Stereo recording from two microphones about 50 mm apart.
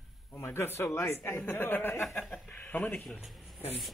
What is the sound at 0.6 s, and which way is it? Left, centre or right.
Speech, left.